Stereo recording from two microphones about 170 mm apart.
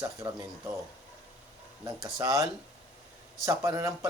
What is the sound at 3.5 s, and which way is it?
Speech, 15° right (ahead or behind).